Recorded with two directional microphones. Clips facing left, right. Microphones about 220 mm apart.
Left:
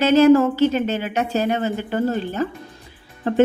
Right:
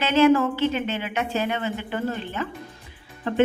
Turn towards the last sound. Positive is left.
turn(degrees=40)  # may be behind; listen again after turning